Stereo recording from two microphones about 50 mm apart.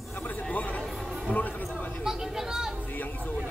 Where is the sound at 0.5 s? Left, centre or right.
Left.